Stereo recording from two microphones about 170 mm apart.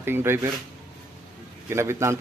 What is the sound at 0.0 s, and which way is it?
Speech, 15° right (ahead or behind).